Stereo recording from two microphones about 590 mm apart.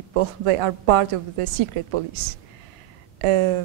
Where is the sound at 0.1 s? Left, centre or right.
Right.